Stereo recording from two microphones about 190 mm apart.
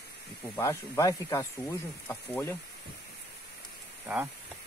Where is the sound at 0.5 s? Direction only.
15° left (ahead or behind).